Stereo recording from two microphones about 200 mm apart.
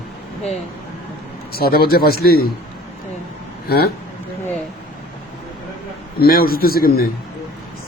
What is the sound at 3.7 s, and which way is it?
Speech, 50° left (ahead or behind).